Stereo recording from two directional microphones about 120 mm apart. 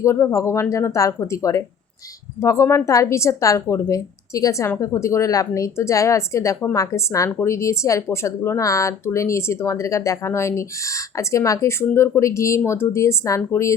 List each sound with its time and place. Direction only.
0.0 s speech: 25° left (ahead or behind)